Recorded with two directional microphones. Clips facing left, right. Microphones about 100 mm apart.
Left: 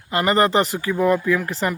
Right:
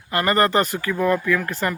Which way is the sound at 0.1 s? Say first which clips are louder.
Left 1 dB; 20° left (ahead or behind).